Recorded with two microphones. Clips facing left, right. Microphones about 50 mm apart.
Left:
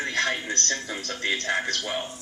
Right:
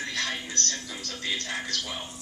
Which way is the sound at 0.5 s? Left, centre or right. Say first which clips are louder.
Left 4 dB; left.